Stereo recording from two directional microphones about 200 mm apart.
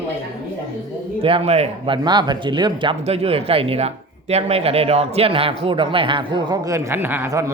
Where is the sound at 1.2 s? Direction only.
25° right (ahead or behind).